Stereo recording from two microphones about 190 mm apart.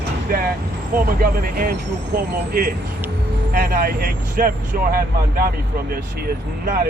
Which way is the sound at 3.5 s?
50° right (ahead or behind).